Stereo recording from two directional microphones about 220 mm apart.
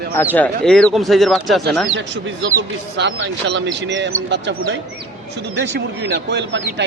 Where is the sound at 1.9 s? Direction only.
55° right (ahead or behind).